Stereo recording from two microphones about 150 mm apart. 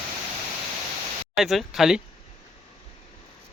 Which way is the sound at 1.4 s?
Centre (ahead or behind).